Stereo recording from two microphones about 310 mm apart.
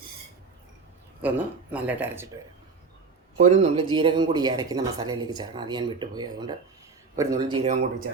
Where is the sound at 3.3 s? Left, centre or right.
Right.